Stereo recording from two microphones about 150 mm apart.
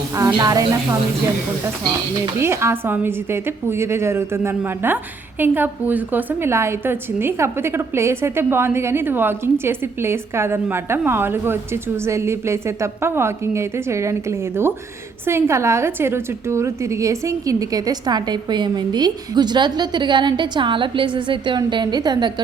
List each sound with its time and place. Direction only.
0.2 s a woman's voice: 25° right (ahead or behind)
2.4 s a woman's voice: 15° right (ahead or behind)